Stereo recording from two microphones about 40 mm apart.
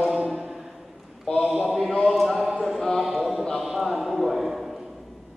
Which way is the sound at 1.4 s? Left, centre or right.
Centre.